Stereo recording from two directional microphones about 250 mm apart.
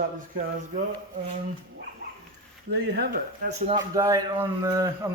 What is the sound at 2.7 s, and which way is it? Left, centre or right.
Speech, right.